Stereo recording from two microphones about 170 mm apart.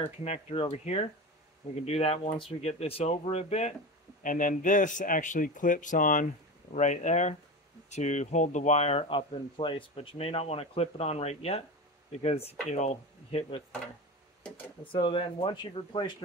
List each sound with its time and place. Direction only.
0.0 s speech: 40° left (ahead or behind)
4.2 s speech: 50° left (ahead or behind)
14.9 s speech: 30° left (ahead or behind)